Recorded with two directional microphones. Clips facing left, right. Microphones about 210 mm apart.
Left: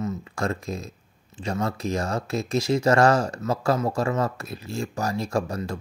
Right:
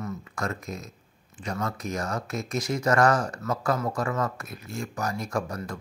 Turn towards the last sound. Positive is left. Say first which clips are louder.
# left 4 dB
turn(degrees=25)  # may be behind; listen again after turning